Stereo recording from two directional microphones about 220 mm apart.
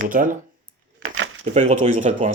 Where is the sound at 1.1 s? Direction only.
60° right (ahead or behind).